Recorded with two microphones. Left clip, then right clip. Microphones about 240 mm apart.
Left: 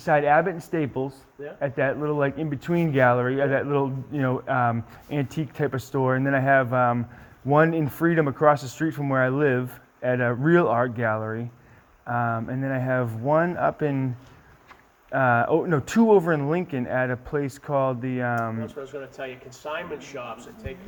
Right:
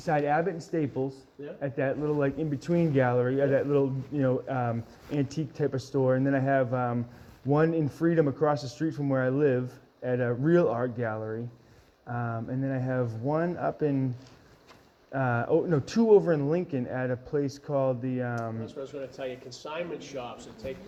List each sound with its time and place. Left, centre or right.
0.0 s speech: left
15.1 s speech: left